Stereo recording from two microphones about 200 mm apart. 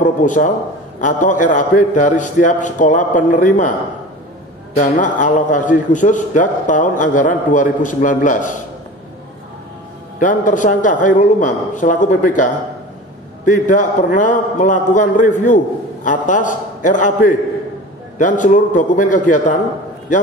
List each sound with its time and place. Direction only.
0.0 s a sound: 40° left (ahead or behind)
1.0 s a man's voice: 40° left (ahead or behind)
4.7 s a man's voice: 40° left (ahead or behind)
10.1 s a man's voice: 40° left (ahead or behind)
13.5 s a man's voice: 40° left (ahead or behind)